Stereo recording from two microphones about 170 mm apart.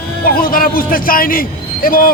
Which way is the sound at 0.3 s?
60° left (ahead or behind).